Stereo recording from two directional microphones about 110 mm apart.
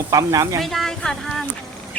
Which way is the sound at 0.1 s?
30° right (ahead or behind).